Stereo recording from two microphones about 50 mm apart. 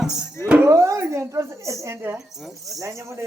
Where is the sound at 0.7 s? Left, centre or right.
Right.